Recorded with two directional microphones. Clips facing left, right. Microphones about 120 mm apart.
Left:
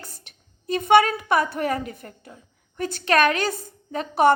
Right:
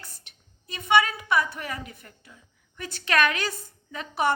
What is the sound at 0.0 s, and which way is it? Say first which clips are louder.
A woman's voice: left 5 dB; 45° left (ahead or behind).